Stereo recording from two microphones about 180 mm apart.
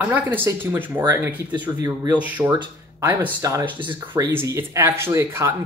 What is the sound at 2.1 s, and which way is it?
Speech, 10° right (ahead or behind).